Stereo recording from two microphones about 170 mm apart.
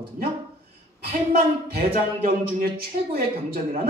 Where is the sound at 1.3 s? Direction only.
60° right (ahead or behind).